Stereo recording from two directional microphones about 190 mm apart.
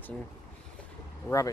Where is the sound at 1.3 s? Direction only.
15° left (ahead or behind).